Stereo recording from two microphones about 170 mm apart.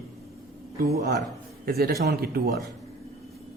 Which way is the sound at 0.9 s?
70° right (ahead or behind).